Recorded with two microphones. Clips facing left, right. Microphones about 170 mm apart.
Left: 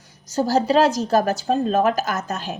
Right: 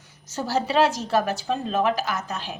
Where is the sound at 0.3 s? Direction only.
40° left (ahead or behind).